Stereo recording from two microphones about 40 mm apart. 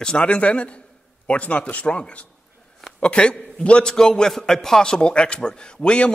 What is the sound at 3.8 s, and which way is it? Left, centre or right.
A man's voice, centre.